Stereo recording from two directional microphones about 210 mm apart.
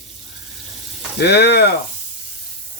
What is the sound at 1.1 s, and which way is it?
Speech, 50° left (ahead or behind).